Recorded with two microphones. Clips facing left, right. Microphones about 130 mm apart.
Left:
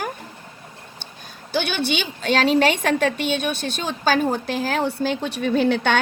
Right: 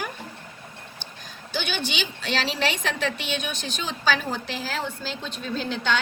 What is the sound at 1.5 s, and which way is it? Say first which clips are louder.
A woman's voice: left 6 dB; 55° left (ahead or behind).